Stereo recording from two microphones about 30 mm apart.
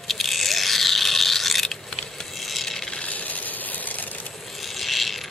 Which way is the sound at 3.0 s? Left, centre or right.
Left.